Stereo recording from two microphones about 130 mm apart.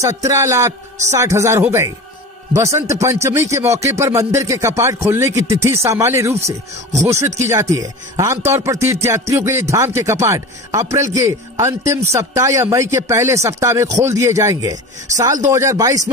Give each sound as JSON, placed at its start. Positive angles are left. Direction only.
{"t": 0.0, "sound": "a man's voice", "side_deg": -25}